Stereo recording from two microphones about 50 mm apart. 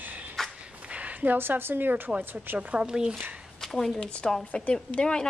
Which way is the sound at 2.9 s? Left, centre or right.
Centre.